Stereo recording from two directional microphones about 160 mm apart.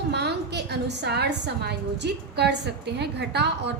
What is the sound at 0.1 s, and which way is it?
A woman's voice, 90° right.